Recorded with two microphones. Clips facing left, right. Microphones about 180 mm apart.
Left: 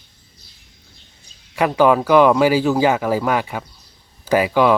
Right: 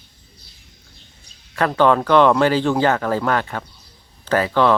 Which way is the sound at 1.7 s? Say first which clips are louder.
Left 1 dB; 5° left (ahead or behind).